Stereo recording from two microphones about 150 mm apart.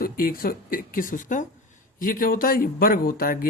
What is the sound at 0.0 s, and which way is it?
Speech, 75° left (ahead or behind).